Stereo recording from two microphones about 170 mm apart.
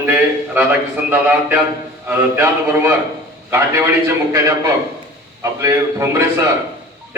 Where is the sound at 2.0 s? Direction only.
15° right (ahead or behind).